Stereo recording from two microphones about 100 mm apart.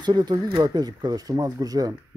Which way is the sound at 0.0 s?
45° right (ahead or behind).